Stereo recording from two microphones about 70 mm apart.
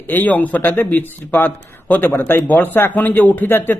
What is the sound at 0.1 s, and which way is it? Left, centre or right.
A man's voice, left.